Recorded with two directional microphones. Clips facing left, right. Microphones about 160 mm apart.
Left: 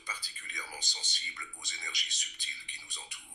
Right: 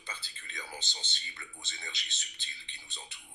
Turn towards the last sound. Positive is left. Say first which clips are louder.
# right 1 dB
turn(degrees=-25)  # may be behind; listen again after turning